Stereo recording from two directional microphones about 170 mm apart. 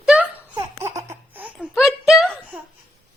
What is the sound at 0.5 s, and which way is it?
Baby laughter, 15° right (ahead or behind).